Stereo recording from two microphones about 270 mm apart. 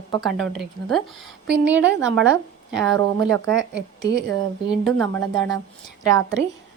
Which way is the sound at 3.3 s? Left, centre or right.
Right.